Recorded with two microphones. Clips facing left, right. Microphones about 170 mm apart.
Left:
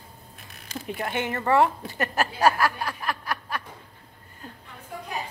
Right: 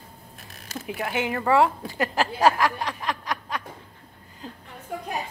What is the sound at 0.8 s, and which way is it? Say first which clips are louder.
Speech: right 1 dB; 5° right (ahead or behind).